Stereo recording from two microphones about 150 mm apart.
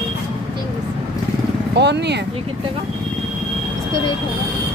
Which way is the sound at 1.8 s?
90° right.